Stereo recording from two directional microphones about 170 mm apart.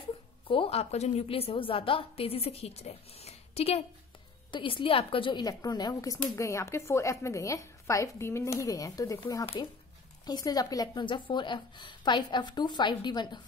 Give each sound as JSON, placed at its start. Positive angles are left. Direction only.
{"t": 0.5, "sound": "a woman's voice", "side_deg": 35}